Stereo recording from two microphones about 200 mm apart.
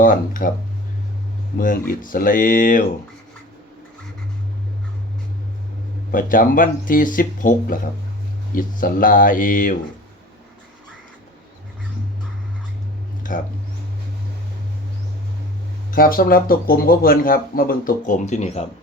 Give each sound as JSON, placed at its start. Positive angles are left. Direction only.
{"t": 0.0, "sound": "speech", "side_deg": 40}
{"t": 1.5, "sound": "speech", "side_deg": 45}
{"t": 6.1, "sound": "speech", "side_deg": 45}
{"t": 13.2, "sound": "speech", "side_deg": 40}
{"t": 15.9, "sound": "speech", "side_deg": 45}